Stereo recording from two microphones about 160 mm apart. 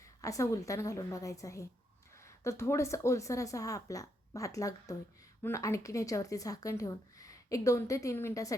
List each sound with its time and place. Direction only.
0.2 s speech: 20° left (ahead or behind)